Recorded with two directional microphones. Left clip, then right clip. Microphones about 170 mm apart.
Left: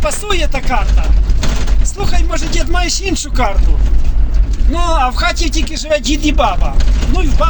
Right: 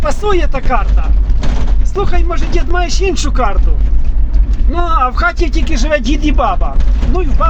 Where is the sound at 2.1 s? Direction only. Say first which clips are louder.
Right 1 dB; 50° right (ahead or behind).